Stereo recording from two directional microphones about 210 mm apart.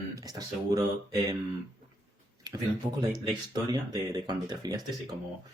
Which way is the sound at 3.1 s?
20° right (ahead or behind).